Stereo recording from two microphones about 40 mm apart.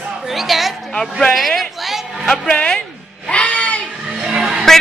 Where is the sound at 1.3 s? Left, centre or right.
Centre.